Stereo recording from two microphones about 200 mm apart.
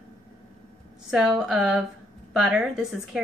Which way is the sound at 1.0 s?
5° right (ahead or behind).